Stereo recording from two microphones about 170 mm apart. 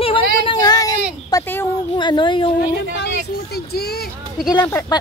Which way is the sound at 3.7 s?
70° left (ahead or behind).